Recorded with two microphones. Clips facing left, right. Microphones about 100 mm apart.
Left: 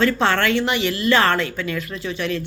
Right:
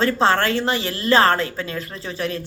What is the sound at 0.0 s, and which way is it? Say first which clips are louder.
A woman's voice: even; 30° right (ahead or behind).